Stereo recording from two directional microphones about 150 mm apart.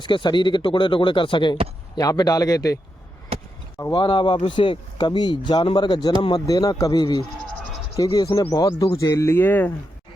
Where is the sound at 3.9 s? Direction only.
35° left (ahead or behind); by 9.7 s 15° left (ahead or behind).